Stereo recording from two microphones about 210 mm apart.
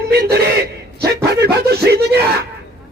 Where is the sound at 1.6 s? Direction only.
50° right (ahead or behind).